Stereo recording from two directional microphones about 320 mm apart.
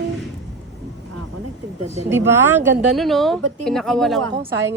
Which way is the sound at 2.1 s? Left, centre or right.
Centre.